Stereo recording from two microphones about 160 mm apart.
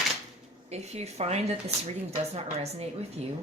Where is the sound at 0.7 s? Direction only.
40° right (ahead or behind).